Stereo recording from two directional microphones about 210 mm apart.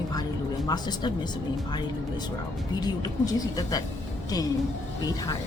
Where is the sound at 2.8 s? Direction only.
15° left (ahead or behind).